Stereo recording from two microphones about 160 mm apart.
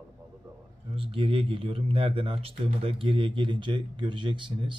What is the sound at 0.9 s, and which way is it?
Speech, 35° right (ahead or behind).